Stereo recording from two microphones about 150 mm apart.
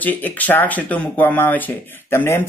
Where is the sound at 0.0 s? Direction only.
10° left (ahead or behind).